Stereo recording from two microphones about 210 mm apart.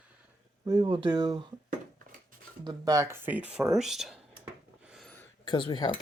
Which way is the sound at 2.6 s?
20° right (ahead or behind).